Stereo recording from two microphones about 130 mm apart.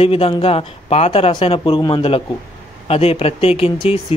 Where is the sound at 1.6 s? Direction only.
35° left (ahead or behind).